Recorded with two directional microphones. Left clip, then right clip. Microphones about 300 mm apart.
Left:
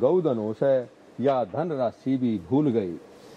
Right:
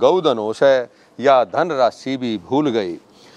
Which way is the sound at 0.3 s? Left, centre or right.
Right.